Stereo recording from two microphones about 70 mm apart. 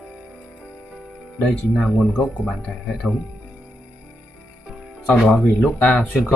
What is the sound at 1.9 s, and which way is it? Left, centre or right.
Speech, centre.